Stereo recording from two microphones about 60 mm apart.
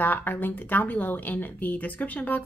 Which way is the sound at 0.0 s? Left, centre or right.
Left.